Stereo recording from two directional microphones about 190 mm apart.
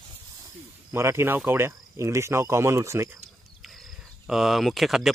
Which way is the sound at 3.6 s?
Centre (ahead or behind).